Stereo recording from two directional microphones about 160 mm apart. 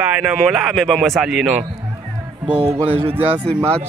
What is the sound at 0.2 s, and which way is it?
Speech, centre (ahead or behind).